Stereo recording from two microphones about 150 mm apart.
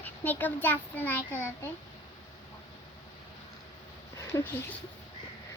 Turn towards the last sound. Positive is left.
turn(degrees=20)  # may be behind; listen again after turning